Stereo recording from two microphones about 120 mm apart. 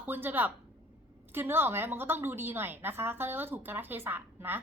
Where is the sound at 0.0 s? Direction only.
15° right (ahead or behind).